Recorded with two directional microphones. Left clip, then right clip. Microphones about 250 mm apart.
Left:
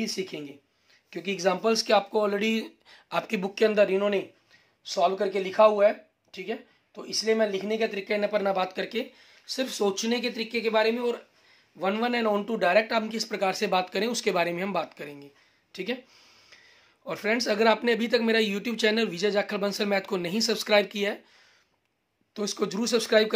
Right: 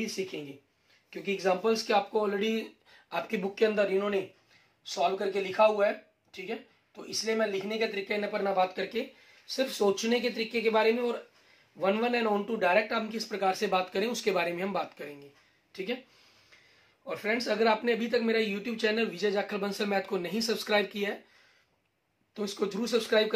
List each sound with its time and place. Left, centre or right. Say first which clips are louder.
0.0 s speech: left 3 dB; left
17.0 s speech: left 4 dB; left
22.3 s speech: left 3 dB; left